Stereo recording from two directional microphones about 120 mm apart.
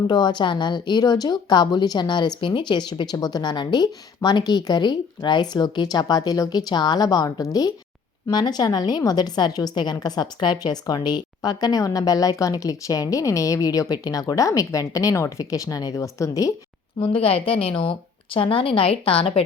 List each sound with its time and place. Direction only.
0.1 s a woman's voice: 35° left (ahead or behind)
17.0 s a woman's voice: 50° left (ahead or behind)